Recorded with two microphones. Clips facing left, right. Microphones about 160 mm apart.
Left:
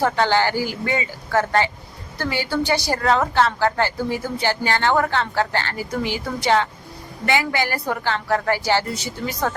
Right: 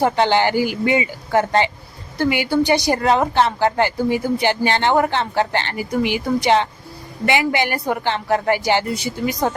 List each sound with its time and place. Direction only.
0.0 s a woman's voice: 20° right (ahead or behind)